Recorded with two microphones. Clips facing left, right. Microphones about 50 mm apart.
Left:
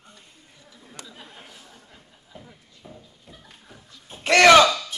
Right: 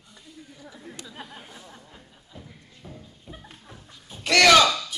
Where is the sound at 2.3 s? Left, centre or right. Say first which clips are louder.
Left 1 dB; centre.